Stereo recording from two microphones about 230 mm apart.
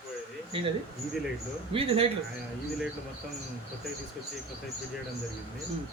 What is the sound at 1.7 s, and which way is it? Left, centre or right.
Speech, right.